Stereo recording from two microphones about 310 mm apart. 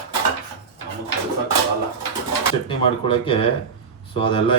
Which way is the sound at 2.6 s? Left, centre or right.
Centre.